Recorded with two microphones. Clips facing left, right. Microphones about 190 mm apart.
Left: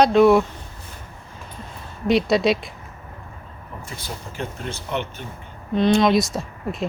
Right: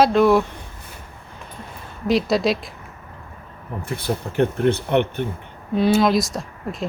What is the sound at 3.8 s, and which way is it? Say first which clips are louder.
Speech: right 11 dB; 60° right (ahead or behind).